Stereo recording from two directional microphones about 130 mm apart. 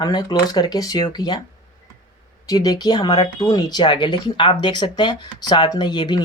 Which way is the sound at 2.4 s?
30° left (ahead or behind).